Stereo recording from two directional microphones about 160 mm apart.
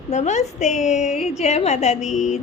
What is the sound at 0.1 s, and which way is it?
A woman's voice, 45° left (ahead or behind).